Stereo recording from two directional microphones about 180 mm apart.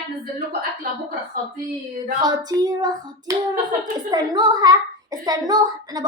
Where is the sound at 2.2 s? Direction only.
20° right (ahead or behind).